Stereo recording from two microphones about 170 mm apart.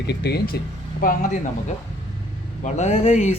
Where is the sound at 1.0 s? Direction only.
45° left (ahead or behind).